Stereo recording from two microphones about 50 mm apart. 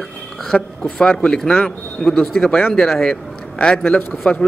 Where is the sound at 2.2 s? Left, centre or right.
Centre.